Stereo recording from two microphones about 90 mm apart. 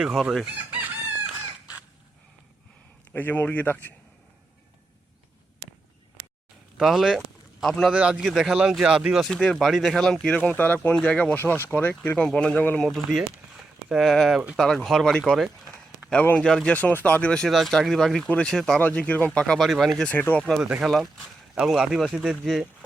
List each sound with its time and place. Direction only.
0.0 s speech: 10° right (ahead or behind)
3.1 s speech: 20° left (ahead or behind)
6.7 s speech: 5° right (ahead or behind)
7.9 s speech: 10° right (ahead or behind)
9.3 s speech: 10° left (ahead or behind)
12.8 s speech: centre (ahead or behind)
18.8 s speech: 15° left (ahead or behind); by 20.1 s centre (ahead or behind)
20.1 s speech: 20° left (ahead or behind)
20.8 s speech: centre (ahead or behind)